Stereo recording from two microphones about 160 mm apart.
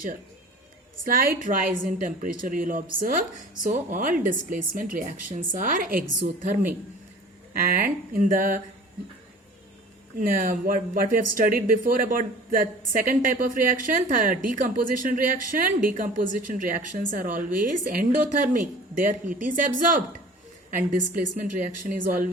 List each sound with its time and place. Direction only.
1.0 s speech: 60° right (ahead or behind)
7.7 s speech: 65° right (ahead or behind)
10.2 s speech: 60° right (ahead or behind)